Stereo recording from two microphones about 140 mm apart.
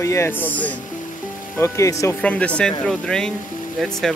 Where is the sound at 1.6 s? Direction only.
20° left (ahead or behind).